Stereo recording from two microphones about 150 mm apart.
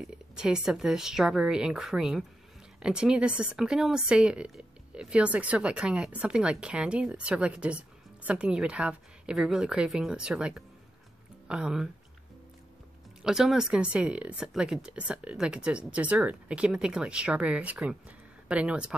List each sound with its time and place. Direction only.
0.0 s a woman's voice: 5° right (ahead or behind)
13.2 s speech: 5° right (ahead or behind)